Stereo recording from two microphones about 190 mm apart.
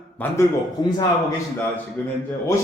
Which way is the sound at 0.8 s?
20° left (ahead or behind).